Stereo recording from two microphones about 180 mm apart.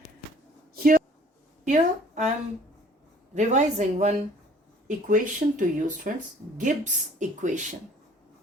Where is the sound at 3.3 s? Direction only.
40° right (ahead or behind).